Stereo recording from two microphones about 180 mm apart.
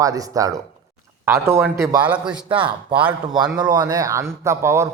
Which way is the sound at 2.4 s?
30° right (ahead or behind).